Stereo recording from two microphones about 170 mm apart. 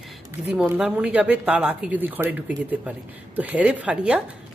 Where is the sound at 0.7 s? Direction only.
5° right (ahead or behind).